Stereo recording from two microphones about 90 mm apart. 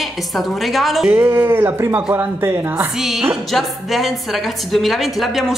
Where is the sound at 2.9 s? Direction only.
5° right (ahead or behind).